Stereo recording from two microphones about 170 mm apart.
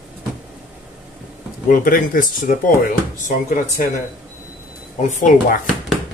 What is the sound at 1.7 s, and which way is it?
Speech, 55° left (ahead or behind).